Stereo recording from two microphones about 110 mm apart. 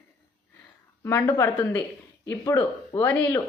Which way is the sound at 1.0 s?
25° left (ahead or behind).